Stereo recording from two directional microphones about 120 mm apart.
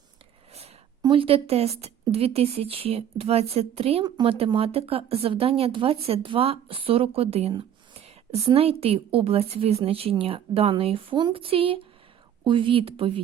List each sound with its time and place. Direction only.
1.0 s speech: 50° right (ahead or behind)
4.0 s speech: 45° right (ahead or behind)
8.5 s speech: 55° right (ahead or behind)